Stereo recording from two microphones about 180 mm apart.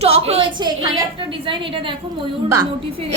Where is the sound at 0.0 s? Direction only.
35° right (ahead or behind).